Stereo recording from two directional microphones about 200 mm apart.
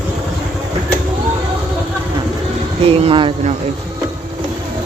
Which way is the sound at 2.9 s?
25° right (ahead or behind).